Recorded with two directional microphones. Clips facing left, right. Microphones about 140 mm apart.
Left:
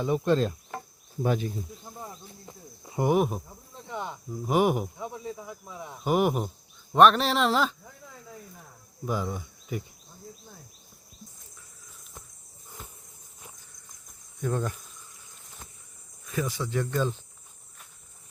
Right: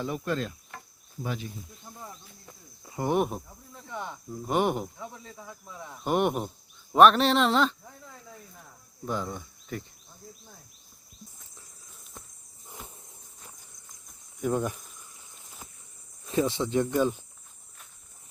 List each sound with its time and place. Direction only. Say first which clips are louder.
0.0 s insect: left 6 dB; 25° left (ahead or behind)
1.2 s speech: left 8 dB; 50° left (ahead or behind)
2.5 s cricket: left 4 dB; 20° left (ahead or behind)
3.1 s speech: left 2 dB; centre (ahead or behind)
3.8 s speech: left 2 dB; 20° left (ahead or behind)
4.3 s speech: left 2 dB; 5° left (ahead or behind)
4.9 s speech: left 6 dB; 20° left (ahead or behind)
6.1 s speech: left 1 dB; 5° left (ahead or behind)
9.0 s cricket: left 2 dB; 10° left (ahead or behind)
14.4 s insect: right 2 dB; 15° right (ahead or behind)
16.2 s speech: right 5 dB; 25° right (ahead or behind)